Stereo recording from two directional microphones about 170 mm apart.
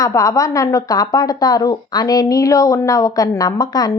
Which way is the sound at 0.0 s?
20° left (ahead or behind).